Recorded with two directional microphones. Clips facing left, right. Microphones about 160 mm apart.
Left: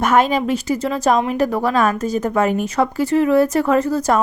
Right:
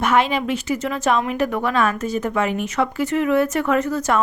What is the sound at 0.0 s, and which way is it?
A woman's voice, 45° left (ahead or behind).